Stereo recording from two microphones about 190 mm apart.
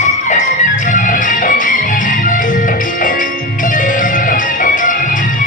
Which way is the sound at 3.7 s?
45° left (ahead or behind).